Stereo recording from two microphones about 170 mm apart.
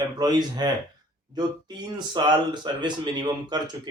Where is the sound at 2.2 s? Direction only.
25° right (ahead or behind).